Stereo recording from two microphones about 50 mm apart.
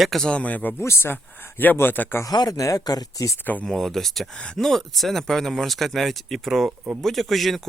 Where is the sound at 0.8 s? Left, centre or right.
Left.